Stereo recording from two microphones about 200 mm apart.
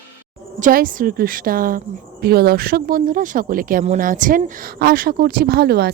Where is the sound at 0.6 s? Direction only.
45° right (ahead or behind).